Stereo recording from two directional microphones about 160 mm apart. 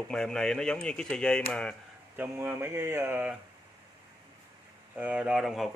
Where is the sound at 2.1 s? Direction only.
15° right (ahead or behind).